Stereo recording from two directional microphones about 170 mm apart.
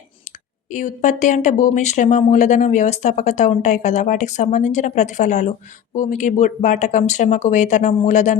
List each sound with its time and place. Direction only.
0.7 s a woman's voice: 50° left (ahead or behind)